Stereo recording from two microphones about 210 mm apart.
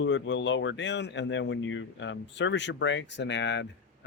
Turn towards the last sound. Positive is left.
turn(degrees=60)  # may be behind; listen again after turning